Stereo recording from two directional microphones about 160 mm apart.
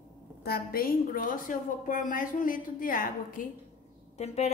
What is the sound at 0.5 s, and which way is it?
A woman's voice, 65° left (ahead or behind).